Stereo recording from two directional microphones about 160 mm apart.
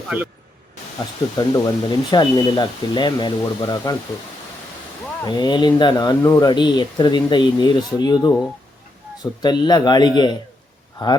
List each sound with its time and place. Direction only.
0.1 s speech: 10° right (ahead or behind)
1.4 s speech: 25° left (ahead or behind)
5.2 s speech: 25° left (ahead or behind)